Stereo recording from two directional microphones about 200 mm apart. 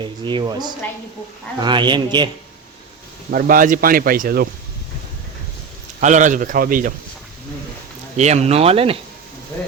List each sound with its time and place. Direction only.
0.0 s speech: 25° right (ahead or behind)
3.3 s speech: 45° right (ahead or behind)
6.0 s a man's voice: 40° right (ahead or behind)
8.1 s a man's voice: 35° right (ahead or behind)